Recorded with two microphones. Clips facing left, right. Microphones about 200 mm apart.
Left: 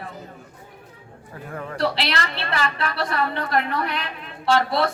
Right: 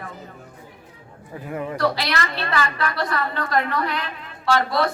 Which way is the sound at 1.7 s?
30° left (ahead or behind).